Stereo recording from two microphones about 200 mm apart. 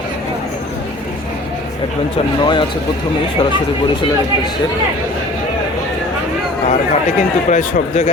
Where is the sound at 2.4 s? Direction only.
25° left (ahead or behind).